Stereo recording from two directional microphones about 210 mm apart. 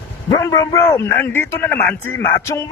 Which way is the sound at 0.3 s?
20° left (ahead or behind).